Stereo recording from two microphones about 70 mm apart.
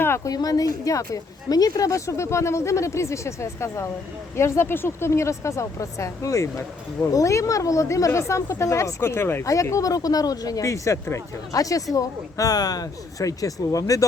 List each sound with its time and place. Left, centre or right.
0.3 s a woman's voice: left
9.0 s speech: left
9.4 s a woman's voice: left